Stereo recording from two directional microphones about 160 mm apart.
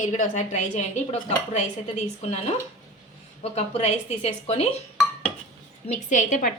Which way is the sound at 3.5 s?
40° left (ahead or behind).